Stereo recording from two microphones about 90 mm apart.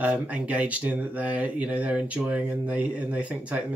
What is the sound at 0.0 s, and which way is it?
Speech, 15° right (ahead or behind).